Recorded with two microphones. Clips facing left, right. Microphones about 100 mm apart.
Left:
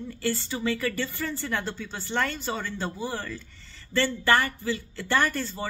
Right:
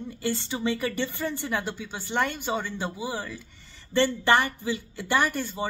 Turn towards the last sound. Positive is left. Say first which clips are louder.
# even
turn(degrees=-15)  # may be behind; listen again after turning